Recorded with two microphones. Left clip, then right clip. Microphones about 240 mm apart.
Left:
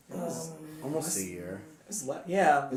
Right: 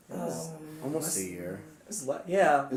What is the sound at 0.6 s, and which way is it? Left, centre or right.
Speech, centre.